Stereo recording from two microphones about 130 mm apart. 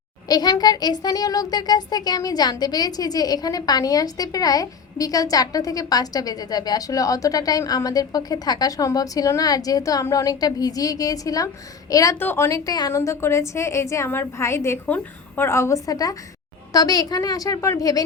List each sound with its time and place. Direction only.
0.3 s a child's voice: 30° left (ahead or behind)